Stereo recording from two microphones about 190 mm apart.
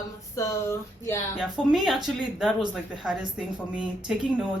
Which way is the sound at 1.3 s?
Centre (ahead or behind).